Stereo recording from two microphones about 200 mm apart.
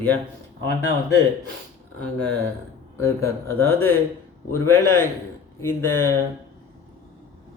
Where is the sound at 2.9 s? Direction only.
15° left (ahead or behind).